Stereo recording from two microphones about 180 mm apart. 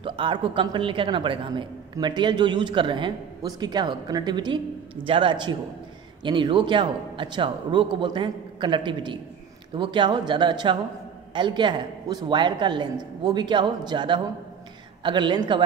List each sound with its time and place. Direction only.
0.0 s a woman's voice: 25° right (ahead or behind)